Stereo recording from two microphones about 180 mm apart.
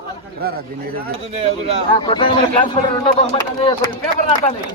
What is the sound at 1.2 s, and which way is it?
Speech, 30° right (ahead or behind).